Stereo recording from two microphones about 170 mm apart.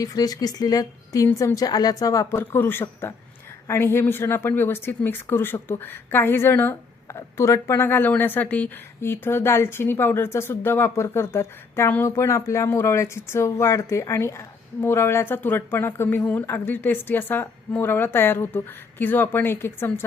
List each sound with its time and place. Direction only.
0.0 s a woman's voice: 20° left (ahead or behind)